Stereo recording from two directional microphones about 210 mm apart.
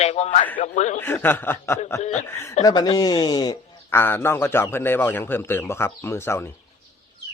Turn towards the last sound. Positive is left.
turn(degrees=10)  # may be behind; listen again after turning